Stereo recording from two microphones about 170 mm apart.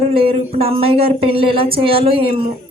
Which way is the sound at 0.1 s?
35° right (ahead or behind).